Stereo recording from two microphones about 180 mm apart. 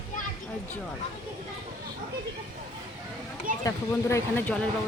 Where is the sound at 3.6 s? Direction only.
15° left (ahead or behind).